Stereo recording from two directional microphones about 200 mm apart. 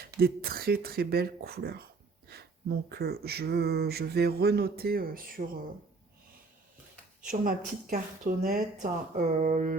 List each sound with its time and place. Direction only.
0.2 s speech: 50° right (ahead or behind)
7.3 s speech: 45° right (ahead or behind)
8.4 s a sound: 40° right (ahead or behind)